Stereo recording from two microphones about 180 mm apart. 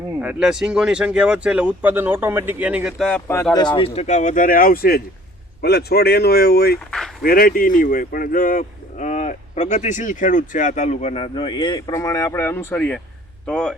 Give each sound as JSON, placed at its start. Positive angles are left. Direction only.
{"t": 0.2, "sound": "speech", "side_deg": -5}
{"t": 3.1, "sound": "speech", "side_deg": 15}
{"t": 3.5, "sound": "speech", "side_deg": 25}